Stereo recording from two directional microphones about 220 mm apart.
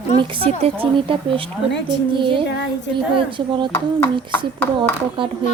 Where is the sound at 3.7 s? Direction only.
10° left (ahead or behind).